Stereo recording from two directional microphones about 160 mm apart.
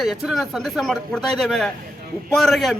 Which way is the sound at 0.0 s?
Centre (ahead or behind).